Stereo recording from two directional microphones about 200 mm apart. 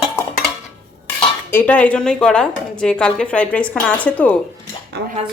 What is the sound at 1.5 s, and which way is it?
Speech, 10° left (ahead or behind).